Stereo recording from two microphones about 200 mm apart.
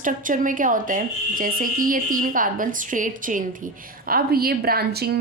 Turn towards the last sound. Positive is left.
turn(degrees=-50)  # may be behind; listen again after turning